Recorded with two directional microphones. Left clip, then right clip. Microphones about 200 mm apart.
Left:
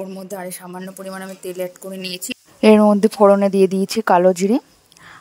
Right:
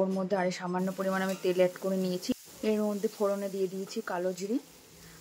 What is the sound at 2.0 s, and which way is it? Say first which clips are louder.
Speech: left 5 dB; 55° left (ahead or behind).